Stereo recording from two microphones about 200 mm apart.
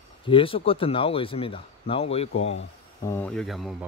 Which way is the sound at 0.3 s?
25° left (ahead or behind).